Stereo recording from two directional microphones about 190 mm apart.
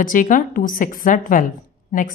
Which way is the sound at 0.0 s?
45° left (ahead or behind).